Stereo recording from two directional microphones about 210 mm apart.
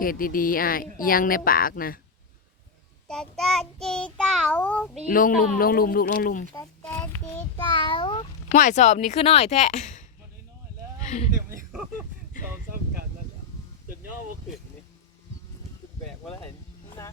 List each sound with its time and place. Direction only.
0.0 s speech: 45° left (ahead or behind)
3.1 s child singing: 5° left (ahead or behind)
5.0 s speech: 40° left (ahead or behind)
6.5 s a child's voice: 10° left (ahead or behind)
7.5 s a child's voice: 25° left (ahead or behind)
8.5 s a woman's voice: 35° left (ahead or behind)
16.0 s speech: 5° left (ahead or behind)
17.0 s speech: 15° left (ahead or behind)